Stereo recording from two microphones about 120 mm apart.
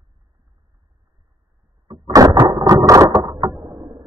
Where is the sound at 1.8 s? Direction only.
30° right (ahead or behind).